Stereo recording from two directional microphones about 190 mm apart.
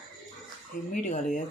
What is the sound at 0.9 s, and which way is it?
Speech, 45° left (ahead or behind).